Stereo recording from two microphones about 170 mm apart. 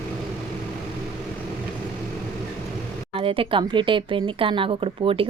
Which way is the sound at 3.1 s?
35° right (ahead or behind).